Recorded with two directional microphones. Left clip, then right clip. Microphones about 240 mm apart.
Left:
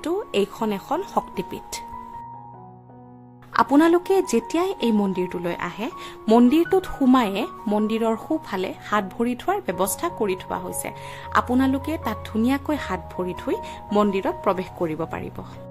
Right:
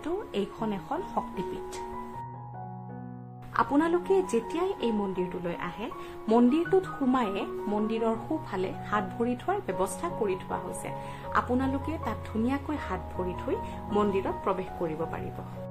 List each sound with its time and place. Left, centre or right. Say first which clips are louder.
0.0 s a woman's voice: left 9 dB; left
3.5 s a woman's voice: left 8 dB; left